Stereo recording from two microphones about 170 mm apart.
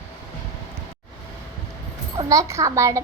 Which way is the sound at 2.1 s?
20° right (ahead or behind).